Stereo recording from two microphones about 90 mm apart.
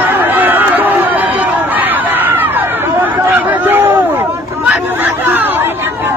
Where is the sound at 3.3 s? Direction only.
20° right (ahead or behind).